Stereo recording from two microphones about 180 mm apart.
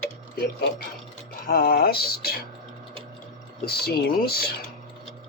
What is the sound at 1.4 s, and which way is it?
Speech, 60° left (ahead or behind).